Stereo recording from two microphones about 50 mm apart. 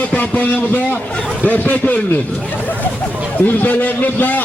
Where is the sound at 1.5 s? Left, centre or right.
Left.